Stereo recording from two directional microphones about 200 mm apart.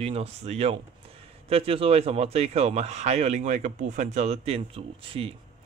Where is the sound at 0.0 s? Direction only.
30° right (ahead or behind).